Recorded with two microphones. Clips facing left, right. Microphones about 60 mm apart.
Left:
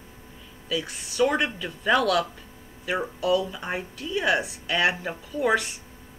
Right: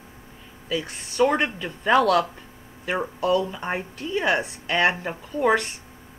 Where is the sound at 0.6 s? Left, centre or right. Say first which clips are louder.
Right 1 dB; right.